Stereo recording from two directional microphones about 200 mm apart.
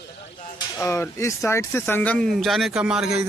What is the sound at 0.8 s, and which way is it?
A man's voice, 15° left (ahead or behind).